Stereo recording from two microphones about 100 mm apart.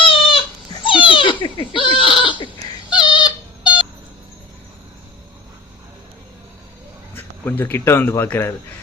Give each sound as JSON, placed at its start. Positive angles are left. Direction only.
{"t": 0.0, "sound": "goat", "side_deg": 60}
{"t": 2.9, "sound": "a sound", "side_deg": 50}
{"t": 7.2, "sound": "speech", "side_deg": 20}